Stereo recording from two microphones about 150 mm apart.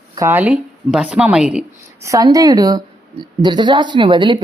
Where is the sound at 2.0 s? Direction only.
20° right (ahead or behind).